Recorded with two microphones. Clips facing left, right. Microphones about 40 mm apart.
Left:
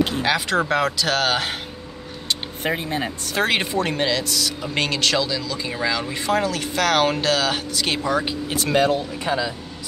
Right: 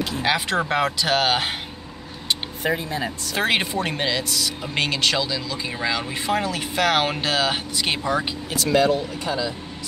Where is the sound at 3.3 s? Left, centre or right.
Centre.